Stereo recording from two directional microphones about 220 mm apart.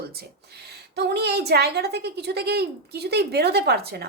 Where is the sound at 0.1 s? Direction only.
45° right (ahead or behind).